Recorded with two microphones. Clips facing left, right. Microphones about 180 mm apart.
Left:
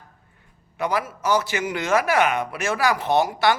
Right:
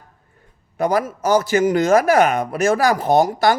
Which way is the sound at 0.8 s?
45° right (ahead or behind).